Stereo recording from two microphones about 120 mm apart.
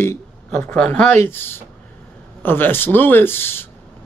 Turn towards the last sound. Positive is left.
turn(degrees=20)  # may be behind; listen again after turning